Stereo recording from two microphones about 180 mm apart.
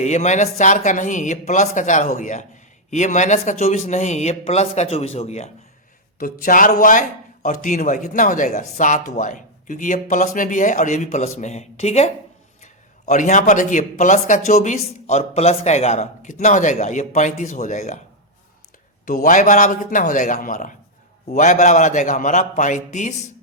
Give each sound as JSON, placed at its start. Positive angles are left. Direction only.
{"t": 0.0, "sound": "speech", "side_deg": 40}
{"t": 6.1, "sound": "speech", "side_deg": 50}
{"t": 19.0, "sound": "speech", "side_deg": 45}